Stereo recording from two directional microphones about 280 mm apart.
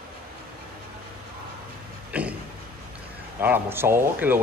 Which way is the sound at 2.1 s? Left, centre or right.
Centre.